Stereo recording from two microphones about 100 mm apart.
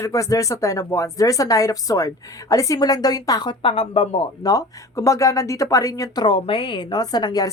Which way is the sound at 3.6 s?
65° left (ahead or behind).